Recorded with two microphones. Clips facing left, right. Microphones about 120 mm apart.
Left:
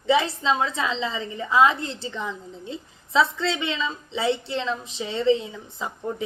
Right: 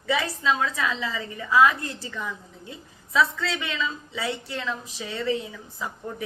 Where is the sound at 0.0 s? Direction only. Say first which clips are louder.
Left 4 dB; 25° left (ahead or behind).